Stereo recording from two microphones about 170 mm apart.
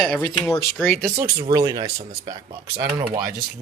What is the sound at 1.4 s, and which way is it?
Speech, 20° right (ahead or behind).